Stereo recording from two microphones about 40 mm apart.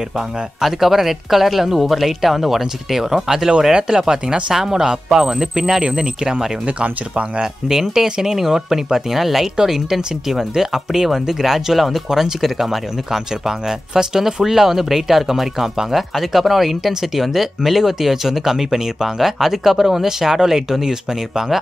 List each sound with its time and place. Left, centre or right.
0.6 s speech: centre
6.6 s speech: right
7.6 s speech: centre